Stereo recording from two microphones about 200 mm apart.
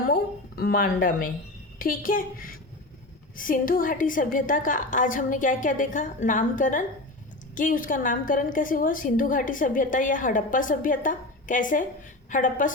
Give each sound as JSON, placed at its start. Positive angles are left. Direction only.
{"t": 0.0, "sound": "a woman's voice", "side_deg": 50}